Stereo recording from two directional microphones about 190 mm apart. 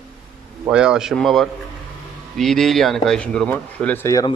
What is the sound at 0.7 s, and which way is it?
Speech, 5° right (ahead or behind).